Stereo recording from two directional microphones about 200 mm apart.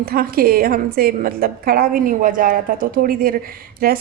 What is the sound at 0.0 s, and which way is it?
A woman's voice, 50° right (ahead or behind).